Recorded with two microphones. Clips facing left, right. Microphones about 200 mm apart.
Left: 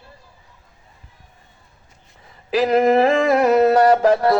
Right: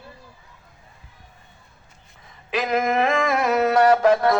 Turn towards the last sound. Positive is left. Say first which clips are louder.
# left 2 dB
turn(degrees=35)  # may be behind; listen again after turning